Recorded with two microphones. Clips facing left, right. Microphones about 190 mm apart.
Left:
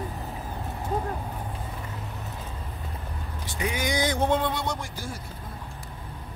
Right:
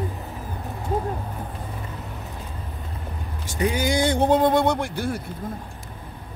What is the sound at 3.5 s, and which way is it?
Vehicle, 35° right (ahead or behind).